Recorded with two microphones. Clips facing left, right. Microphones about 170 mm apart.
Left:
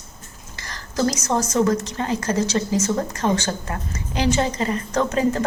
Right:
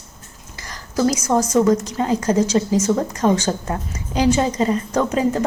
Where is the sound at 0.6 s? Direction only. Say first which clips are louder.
Right 3 dB; 10° right (ahead or behind).